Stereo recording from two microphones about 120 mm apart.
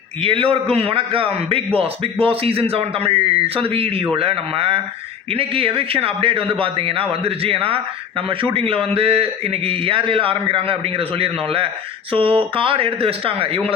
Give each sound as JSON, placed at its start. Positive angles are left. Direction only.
{"t": 0.2, "sound": "a man's voice", "side_deg": -50}